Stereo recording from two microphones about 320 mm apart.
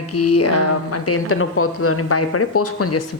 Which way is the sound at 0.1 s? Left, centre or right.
Left.